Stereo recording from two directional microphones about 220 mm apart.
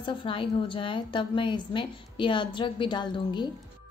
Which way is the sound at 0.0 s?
25° left (ahead or behind).